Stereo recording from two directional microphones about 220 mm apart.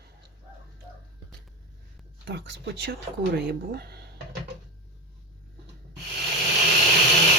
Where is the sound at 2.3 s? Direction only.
50° right (ahead or behind).